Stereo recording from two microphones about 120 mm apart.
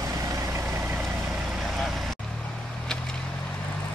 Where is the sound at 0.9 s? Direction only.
Centre (ahead or behind).